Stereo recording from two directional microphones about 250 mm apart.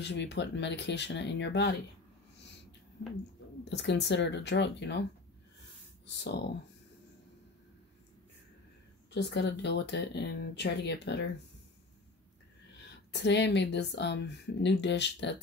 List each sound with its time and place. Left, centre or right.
0.0 s speech: left
3.6 s speech: left
6.0 s speech: left
9.1 s speech: left
13.1 s speech: left